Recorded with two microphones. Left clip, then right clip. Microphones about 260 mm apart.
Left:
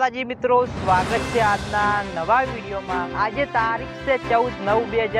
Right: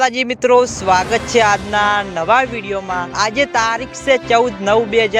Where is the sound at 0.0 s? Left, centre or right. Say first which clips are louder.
Right 7 dB; right.